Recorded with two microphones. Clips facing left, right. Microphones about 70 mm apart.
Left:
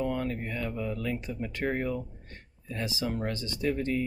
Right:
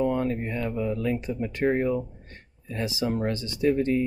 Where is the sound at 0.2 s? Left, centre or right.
Right.